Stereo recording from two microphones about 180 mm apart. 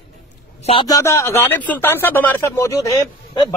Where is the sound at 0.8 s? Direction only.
20° left (ahead or behind).